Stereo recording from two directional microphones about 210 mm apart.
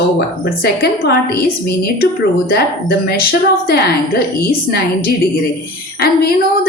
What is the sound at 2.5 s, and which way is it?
A woman's voice, 45° left (ahead or behind).